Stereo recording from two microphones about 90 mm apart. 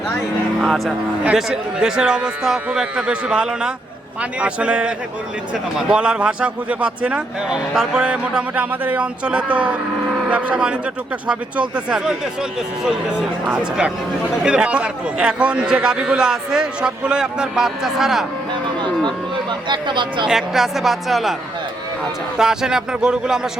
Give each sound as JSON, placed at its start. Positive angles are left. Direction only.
{"t": 0.6, "sound": "a man's voice", "side_deg": 0}
{"t": 19.6, "sound": "speech", "side_deg": -60}
{"t": 20.2, "sound": "speech", "side_deg": -5}
{"t": 22.4, "sound": "a man's voice", "side_deg": -5}